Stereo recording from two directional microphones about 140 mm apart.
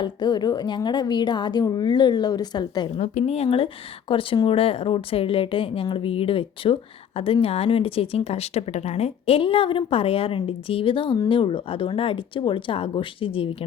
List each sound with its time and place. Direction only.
0.0 s speech: 30° left (ahead or behind)
3.0 s speech: 50° left (ahead or behind)